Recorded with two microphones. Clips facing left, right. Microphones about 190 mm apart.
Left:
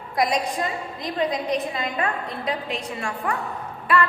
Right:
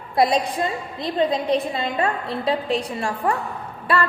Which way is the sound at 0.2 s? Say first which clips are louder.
Right 4 dB; 30° right (ahead or behind).